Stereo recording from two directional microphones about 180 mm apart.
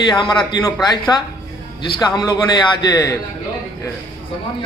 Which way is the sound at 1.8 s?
25° left (ahead or behind).